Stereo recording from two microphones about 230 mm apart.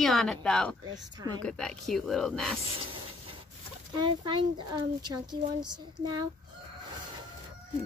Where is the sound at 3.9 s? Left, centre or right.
Centre.